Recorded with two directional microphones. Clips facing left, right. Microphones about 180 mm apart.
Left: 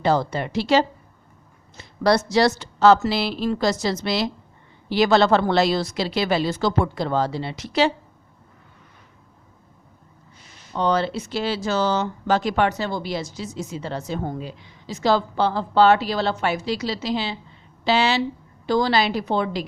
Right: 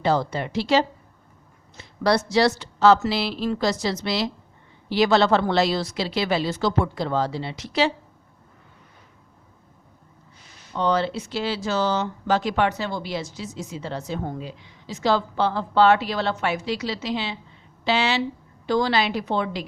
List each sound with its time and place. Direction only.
0.0 s a woman's voice: 45° left (ahead or behind)
2.0 s a woman's voice: 45° left (ahead or behind)
10.8 s speech: 45° left (ahead or behind)